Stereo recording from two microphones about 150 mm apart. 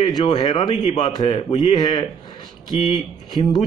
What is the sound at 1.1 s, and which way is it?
Speech, 30° left (ahead or behind).